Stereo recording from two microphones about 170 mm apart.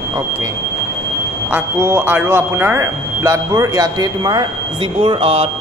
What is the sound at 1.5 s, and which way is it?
Speech, 10° right (ahead or behind).